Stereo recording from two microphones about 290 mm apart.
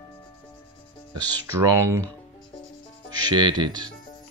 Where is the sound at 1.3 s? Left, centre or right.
Centre.